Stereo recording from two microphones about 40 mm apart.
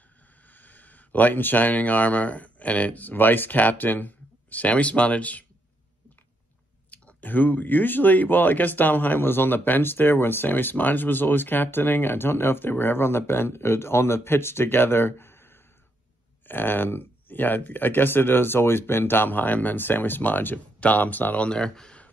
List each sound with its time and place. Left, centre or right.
0.5 s speech: left
6.9 s speech: left
16.4 s speech: left
21.4 s speech: left